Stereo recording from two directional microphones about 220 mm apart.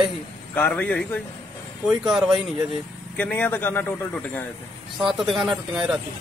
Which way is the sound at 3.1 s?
10° left (ahead or behind).